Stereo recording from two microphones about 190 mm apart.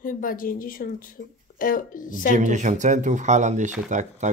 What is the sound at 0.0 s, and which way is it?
Speech, 45° left (ahead or behind).